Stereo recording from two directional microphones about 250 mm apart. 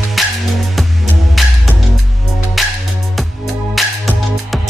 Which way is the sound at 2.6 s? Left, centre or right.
Centre.